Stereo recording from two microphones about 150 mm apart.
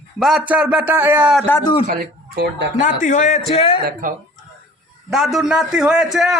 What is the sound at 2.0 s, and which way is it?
Speech, 90° right.